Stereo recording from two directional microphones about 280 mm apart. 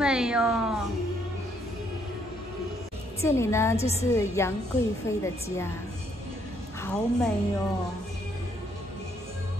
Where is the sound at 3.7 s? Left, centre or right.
Left.